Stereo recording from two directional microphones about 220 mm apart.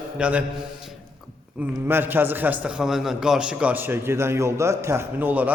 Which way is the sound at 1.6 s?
10° right (ahead or behind).